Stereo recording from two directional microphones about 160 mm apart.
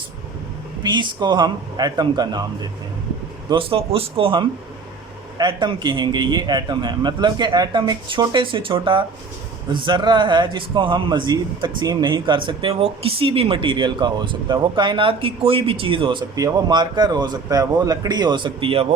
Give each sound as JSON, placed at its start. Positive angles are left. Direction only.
{"t": 0.8, "sound": "speech", "side_deg": -30}
{"t": 3.5, "sound": "a man's voice", "side_deg": -35}